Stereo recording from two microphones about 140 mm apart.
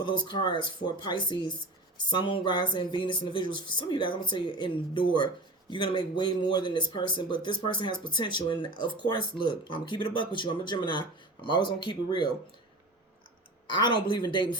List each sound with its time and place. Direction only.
0.0 s speech: 35° left (ahead or behind)
13.7 s speech: 35° left (ahead or behind)